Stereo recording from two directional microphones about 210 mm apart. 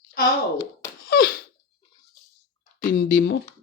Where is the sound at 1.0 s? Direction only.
45° left (ahead or behind).